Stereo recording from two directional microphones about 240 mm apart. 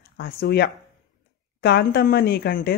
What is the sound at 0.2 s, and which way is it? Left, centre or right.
Speech, left.